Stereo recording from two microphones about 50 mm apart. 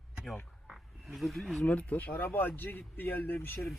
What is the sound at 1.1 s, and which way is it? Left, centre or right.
Music, centre.